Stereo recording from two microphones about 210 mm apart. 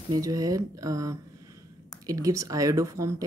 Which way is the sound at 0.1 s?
15° right (ahead or behind).